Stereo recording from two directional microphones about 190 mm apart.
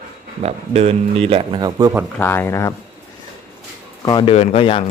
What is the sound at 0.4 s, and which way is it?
Speech, 35° right (ahead or behind).